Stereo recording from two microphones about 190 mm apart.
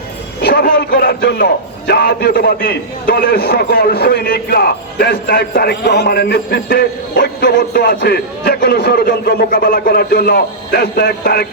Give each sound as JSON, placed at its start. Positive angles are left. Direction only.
{"t": 0.4, "sound": "a man's voice", "side_deg": 55}